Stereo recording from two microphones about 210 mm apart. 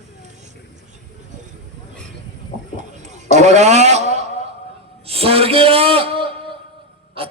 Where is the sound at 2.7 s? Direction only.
35° right (ahead or behind).